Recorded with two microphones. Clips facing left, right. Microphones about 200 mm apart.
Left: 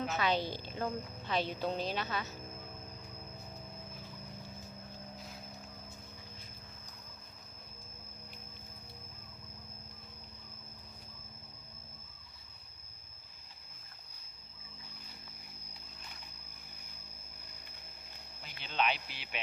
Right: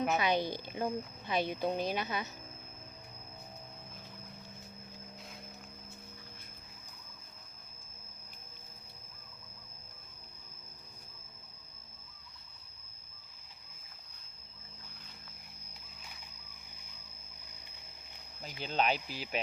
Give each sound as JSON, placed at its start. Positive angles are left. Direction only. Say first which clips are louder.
{"t": 0.2, "sound": "a woman's voice", "louder": "right 2 dB", "side_deg": -15}
{"t": 18.6, "sound": "speech", "louder": "right 2 dB", "side_deg": -40}